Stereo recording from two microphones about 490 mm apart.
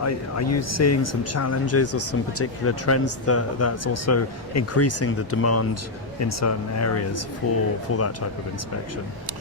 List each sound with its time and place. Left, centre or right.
0.0 s speech: left